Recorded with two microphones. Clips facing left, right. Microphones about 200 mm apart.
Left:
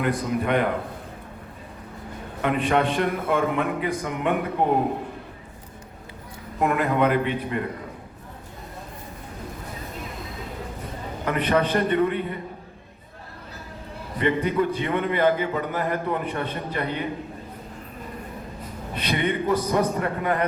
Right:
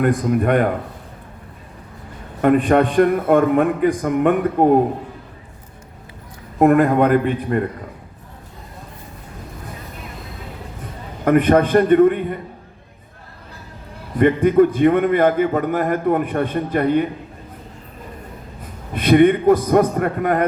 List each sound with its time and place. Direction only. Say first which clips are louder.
0.0 s a man's voice: right 7 dB; 50° right (ahead or behind)
2.4 s a man's voice: right 8 dB; 50° right (ahead or behind)
6.6 s a man's voice: right 8 dB; 50° right (ahead or behind)
11.3 s a man's voice: right 9 dB; 50° right (ahead or behind)
14.2 s a man's voice: right 9 dB; 50° right (ahead or behind)
18.9 s a man's voice: right 12 dB; 50° right (ahead or behind)